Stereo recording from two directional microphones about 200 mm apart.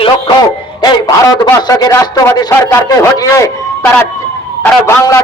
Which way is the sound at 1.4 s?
20° left (ahead or behind).